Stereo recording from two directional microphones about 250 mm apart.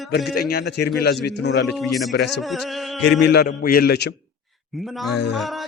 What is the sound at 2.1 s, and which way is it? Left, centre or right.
Speech, left.